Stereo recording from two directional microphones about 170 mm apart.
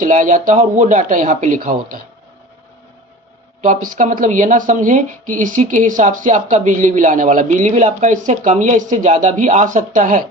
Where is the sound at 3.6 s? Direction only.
45° right (ahead or behind).